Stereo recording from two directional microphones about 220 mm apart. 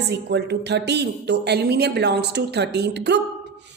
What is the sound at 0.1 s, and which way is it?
A woman's voice, 50° right (ahead or behind).